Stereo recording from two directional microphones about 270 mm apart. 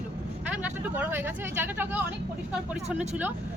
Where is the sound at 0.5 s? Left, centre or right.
Centre.